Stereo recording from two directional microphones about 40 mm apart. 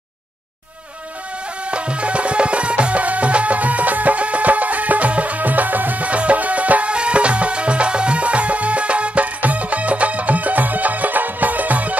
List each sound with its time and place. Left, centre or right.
1.7 s music: right